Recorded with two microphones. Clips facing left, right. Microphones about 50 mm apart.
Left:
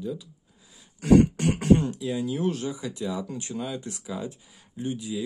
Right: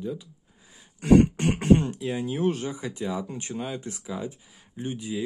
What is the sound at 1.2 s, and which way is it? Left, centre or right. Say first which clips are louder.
Speech: even; right.